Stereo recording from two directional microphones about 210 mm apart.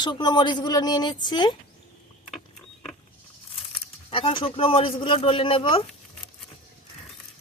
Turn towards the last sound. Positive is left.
turn(degrees=25)  # may be behind; listen again after turning